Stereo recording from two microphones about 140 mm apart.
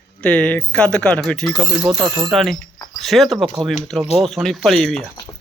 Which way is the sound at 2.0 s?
35° right (ahead or behind).